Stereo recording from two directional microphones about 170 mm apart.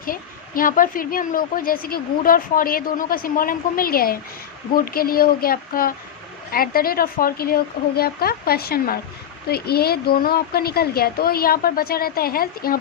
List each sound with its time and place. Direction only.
0.0 s a woman's voice: 55° left (ahead or behind)